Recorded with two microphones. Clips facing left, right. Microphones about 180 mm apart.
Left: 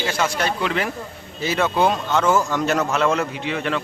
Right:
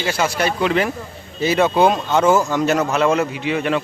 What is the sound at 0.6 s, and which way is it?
Speech, 20° right (ahead or behind).